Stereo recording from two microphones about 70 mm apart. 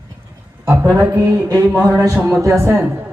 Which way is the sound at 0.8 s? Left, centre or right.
Right.